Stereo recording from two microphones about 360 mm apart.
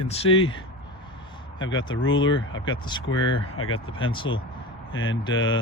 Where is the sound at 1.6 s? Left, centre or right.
Left.